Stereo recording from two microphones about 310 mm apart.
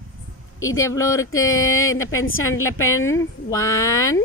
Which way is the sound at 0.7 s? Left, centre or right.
Centre.